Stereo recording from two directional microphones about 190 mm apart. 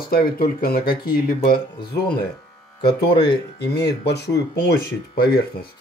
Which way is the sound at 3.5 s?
60° left (ahead or behind).